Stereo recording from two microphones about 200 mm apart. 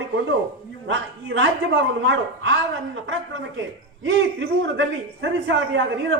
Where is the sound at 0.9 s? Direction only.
65° right (ahead or behind).